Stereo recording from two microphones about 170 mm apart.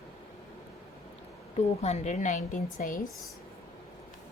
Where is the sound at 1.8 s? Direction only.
40° left (ahead or behind).